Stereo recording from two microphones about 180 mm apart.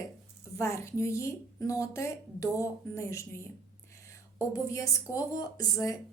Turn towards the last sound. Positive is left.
turn(degrees=20)  # may be behind; listen again after turning